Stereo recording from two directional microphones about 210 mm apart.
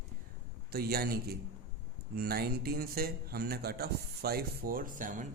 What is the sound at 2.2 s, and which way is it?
Speech, 45° right (ahead or behind).